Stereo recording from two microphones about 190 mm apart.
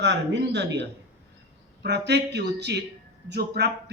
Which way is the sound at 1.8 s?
65° right (ahead or behind).